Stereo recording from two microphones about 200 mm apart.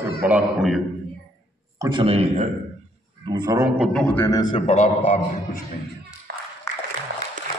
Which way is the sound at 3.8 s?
5° left (ahead or behind).